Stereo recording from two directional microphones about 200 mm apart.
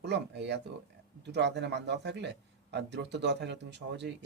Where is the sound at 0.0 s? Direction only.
60° right (ahead or behind).